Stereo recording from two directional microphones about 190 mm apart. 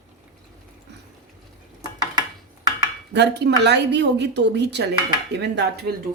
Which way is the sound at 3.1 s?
60° right (ahead or behind).